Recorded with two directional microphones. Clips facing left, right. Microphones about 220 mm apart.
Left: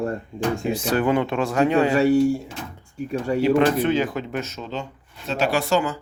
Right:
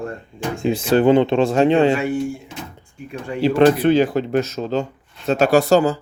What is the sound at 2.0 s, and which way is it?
Speech, 40° left (ahead or behind).